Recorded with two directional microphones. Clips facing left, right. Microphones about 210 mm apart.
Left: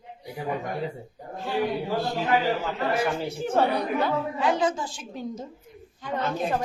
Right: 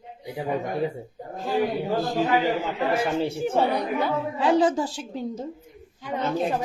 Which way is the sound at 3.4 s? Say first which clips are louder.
Left 3 dB; 10° right (ahead or behind).